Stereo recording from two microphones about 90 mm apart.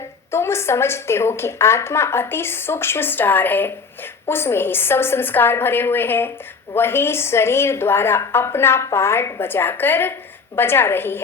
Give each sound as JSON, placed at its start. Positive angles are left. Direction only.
{"t": 0.3, "sound": "a woman's voice", "side_deg": 30}